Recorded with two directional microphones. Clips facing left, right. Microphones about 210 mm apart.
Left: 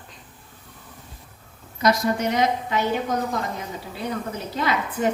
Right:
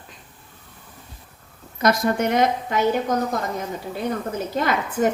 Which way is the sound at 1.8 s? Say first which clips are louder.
Right 1 dB; 55° right (ahead or behind).